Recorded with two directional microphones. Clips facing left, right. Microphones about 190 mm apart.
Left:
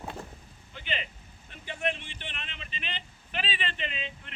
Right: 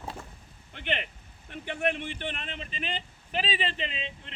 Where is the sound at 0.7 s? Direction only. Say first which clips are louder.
Right 4 dB; 60° right (ahead or behind).